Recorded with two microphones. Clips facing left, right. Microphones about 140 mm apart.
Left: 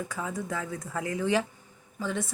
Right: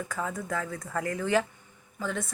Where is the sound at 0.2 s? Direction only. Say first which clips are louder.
Right 2 dB; 15° left (ahead or behind).